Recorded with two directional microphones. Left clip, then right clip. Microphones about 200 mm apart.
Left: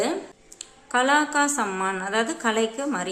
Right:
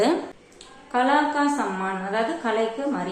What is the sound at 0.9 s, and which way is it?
Speech, 40° left (ahead or behind).